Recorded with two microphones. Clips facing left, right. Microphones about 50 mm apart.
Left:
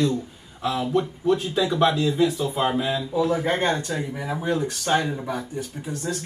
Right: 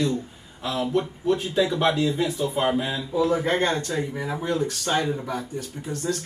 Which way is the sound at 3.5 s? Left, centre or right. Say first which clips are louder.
Even; centre.